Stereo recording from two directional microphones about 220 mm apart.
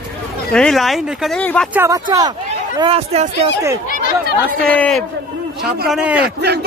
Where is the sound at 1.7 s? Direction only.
15° right (ahead or behind).